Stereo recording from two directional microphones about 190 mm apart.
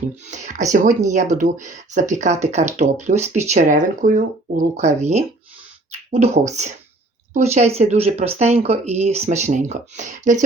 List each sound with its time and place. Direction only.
0.0 s speech: 40° right (ahead or behind)